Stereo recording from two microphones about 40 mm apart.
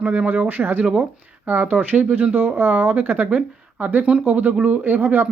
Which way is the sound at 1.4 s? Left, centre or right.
Right.